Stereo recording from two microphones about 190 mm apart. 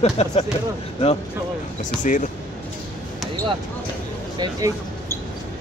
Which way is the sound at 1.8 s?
40° left (ahead or behind).